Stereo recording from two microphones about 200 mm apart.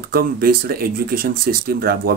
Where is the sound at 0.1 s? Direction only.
50° right (ahead or behind).